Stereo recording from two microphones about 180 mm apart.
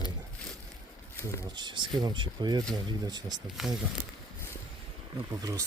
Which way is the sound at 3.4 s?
Centre (ahead or behind).